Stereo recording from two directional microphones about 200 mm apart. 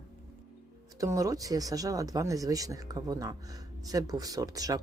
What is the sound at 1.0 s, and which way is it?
Speech, 15° right (ahead or behind).